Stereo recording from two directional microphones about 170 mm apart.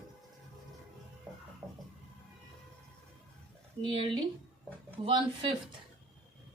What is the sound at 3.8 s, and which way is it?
A woman's voice, 30° right (ahead or behind).